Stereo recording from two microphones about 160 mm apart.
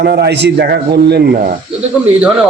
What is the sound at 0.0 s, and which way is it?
A man's voice, 90° right.